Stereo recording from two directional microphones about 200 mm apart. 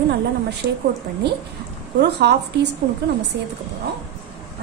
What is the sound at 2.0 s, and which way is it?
Speech, 55° right (ahead or behind).